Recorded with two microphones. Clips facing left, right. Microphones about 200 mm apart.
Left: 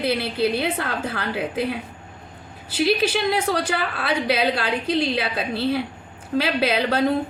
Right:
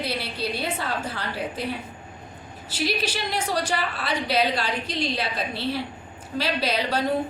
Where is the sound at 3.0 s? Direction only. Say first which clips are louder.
Left 7 dB; 55° left (ahead or behind).